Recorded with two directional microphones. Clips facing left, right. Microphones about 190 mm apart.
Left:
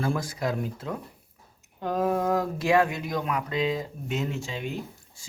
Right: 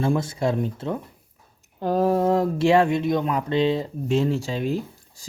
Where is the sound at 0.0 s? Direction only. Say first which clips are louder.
Right 5 dB; 25° right (ahead or behind).